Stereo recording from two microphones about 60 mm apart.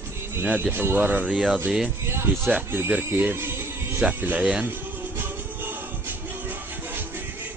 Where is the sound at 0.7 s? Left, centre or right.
Right.